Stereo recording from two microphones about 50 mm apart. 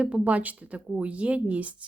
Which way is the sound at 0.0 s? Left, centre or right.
Right.